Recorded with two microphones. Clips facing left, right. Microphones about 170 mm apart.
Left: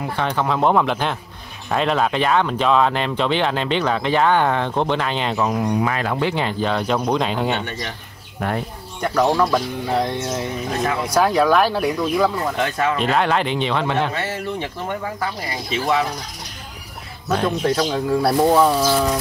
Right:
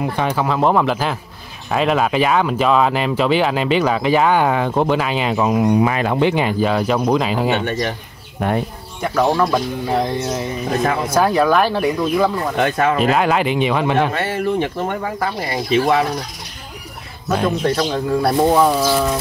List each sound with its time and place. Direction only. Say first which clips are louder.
0.1 s speech: right 2 dB; 10° right (ahead or behind)
8.4 s speech: right 4 dB; 20° right (ahead or behind)
9.0 s speech: right 1 dB; 5° right (ahead or behind)
12.5 s speech: right 4 dB; 50° right (ahead or behind)
13.0 s speech: right 3 dB; 5° right (ahead or behind)
14.1 s speech: right 6 dB; 55° right (ahead or behind)
15.1 s speech: right 5 dB; 40° right (ahead or behind)
17.3 s speech: right 2 dB; 5° right (ahead or behind)